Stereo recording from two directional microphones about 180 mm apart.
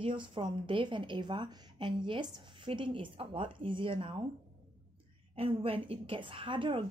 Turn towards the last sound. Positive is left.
turn(degrees=-25)  # may be behind; listen again after turning